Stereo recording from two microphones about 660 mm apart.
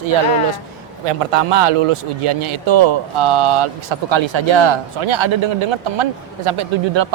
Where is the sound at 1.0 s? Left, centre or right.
Right.